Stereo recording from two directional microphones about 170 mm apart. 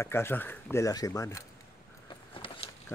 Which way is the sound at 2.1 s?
30° left (ahead or behind).